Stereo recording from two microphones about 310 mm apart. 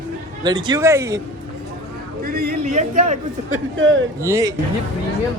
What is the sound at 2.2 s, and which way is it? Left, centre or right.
Speech, right.